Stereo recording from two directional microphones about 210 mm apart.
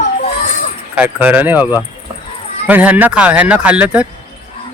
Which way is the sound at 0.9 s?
10° right (ahead or behind).